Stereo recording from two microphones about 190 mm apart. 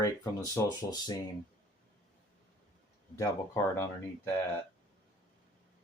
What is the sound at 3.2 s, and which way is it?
Speech, 15° left (ahead or behind).